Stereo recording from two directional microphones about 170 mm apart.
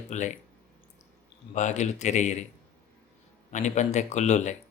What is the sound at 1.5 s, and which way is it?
Speech, 45° left (ahead or behind).